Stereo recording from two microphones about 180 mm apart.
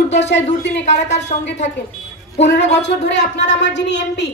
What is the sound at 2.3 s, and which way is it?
Speech, 75° left (ahead or behind).